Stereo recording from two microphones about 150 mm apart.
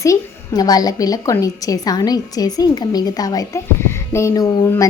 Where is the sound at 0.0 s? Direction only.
25° left (ahead or behind).